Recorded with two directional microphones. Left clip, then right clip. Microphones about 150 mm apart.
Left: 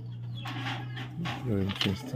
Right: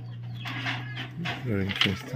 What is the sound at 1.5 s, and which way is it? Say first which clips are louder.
Speech: right 1 dB; 10° left (ahead or behind).